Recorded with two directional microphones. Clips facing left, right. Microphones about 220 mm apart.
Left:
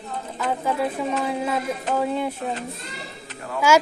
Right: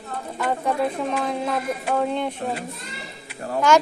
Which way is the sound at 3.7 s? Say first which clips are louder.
Even; 10° left (ahead or behind).